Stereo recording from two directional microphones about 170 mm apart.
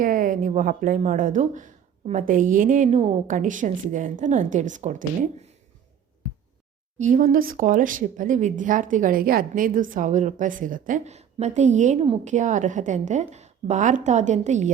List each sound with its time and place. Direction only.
0.0 s a woman's voice: 50° right (ahead or behind)
7.0 s a woman's voice: 55° right (ahead or behind)